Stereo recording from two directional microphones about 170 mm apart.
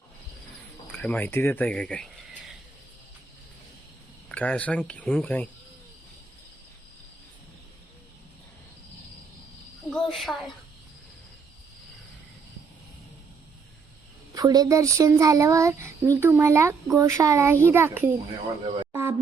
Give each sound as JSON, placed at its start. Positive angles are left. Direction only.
{"t": 0.9, "sound": "speech", "side_deg": 10}
{"t": 4.3, "sound": "speech", "side_deg": 5}
{"t": 9.9, "sound": "cricket", "side_deg": 0}
{"t": 14.3, "sound": "a child's voice", "side_deg": -20}